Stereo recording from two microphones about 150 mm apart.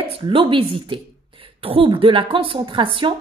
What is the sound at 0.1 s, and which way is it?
A woman's voice, 35° right (ahead or behind).